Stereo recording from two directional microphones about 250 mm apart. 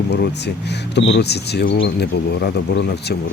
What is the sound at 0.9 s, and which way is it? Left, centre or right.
Speech, left.